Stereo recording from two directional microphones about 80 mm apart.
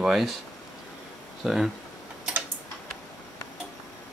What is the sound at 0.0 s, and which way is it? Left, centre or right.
Speech, centre.